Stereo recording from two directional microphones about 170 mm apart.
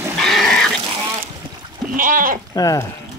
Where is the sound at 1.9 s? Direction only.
55° right (ahead or behind).